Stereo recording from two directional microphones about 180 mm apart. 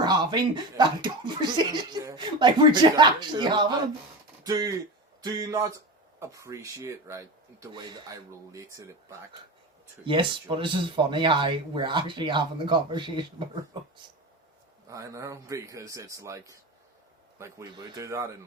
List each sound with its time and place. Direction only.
0.0 s speech: 25° right (ahead or behind)
10.1 s speech: 30° right (ahead or behind)
14.8 s speech: 20° right (ahead or behind)